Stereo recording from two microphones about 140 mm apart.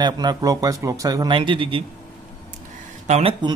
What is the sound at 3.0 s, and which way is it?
Speech, 55° right (ahead or behind).